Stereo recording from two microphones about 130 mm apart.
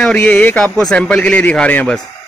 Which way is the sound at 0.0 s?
10° left (ahead or behind).